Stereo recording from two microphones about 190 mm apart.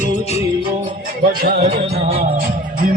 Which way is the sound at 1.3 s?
50° right (ahead or behind).